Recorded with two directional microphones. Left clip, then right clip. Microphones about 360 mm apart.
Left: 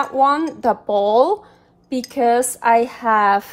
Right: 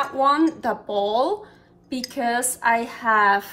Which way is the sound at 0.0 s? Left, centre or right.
Centre.